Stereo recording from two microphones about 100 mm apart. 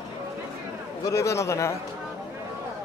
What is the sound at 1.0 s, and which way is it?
Speech, 30° left (ahead or behind).